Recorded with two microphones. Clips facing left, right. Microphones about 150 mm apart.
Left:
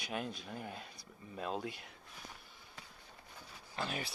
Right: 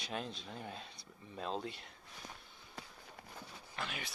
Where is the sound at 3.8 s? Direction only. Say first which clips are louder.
Left 4 dB; 35° left (ahead or behind).